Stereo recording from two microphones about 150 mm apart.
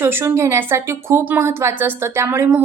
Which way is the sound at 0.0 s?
15° right (ahead or behind).